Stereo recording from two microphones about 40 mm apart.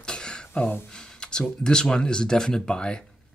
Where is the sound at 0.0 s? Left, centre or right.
Left.